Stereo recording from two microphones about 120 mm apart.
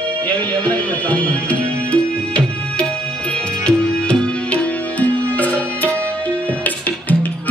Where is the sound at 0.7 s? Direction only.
10° left (ahead or behind).